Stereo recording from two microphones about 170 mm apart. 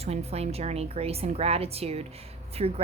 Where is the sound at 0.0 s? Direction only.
40° right (ahead or behind).